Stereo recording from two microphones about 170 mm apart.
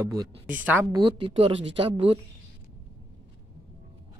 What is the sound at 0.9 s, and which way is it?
A woman's voice, 25° right (ahead or behind).